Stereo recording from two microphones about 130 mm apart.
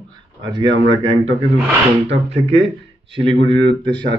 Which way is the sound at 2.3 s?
50° right (ahead or behind).